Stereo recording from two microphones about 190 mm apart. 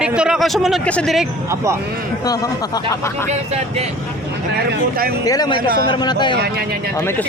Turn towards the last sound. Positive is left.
turn(degrees=25)  # may be behind; listen again after turning